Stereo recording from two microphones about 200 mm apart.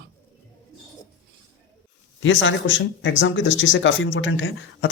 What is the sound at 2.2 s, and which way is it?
Speech, 70° left (ahead or behind).